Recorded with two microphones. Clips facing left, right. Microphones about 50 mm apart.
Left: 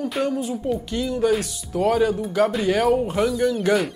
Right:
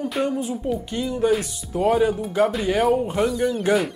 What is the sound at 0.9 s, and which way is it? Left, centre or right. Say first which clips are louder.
Speech: even; centre.